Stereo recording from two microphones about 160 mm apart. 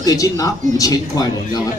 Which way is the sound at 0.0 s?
20° left (ahead or behind).